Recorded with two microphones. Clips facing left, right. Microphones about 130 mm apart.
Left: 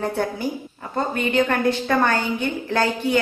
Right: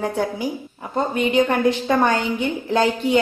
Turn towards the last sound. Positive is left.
turn(degrees=-20)  # may be behind; listen again after turning